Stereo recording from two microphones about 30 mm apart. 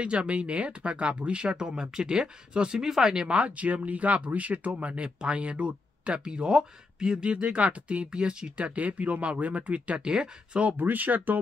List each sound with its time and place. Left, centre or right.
0.0 s speech: right; by 3.3 s centre
3.3 s speech: right
8.6 s speech: right
10.0 s speech: right
10.8 s speech: right